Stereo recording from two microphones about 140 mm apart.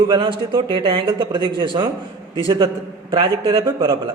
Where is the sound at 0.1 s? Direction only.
35° right (ahead or behind).